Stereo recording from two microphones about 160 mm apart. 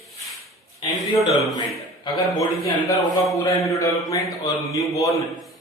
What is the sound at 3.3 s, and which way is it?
Speech, 20° left (ahead or behind).